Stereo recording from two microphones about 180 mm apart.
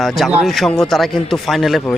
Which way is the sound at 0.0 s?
Centre (ahead or behind).